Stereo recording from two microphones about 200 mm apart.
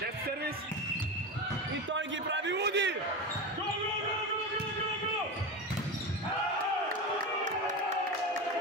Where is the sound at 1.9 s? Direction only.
65° right (ahead or behind).